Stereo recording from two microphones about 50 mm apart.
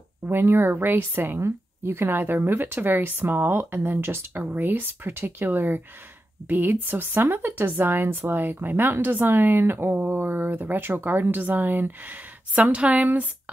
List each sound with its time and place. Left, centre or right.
0.3 s speech: right
1.4 s speech: right
4.4 s speech: right